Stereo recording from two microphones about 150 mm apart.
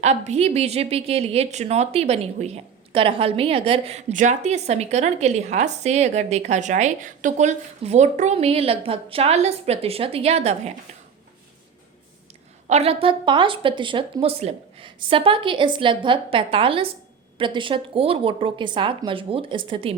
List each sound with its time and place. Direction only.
0.0 s a woman's voice: 50° right (ahead or behind)
4.1 s a woman's voice: 55° right (ahead or behind)
12.6 s speech: 45° right (ahead or behind)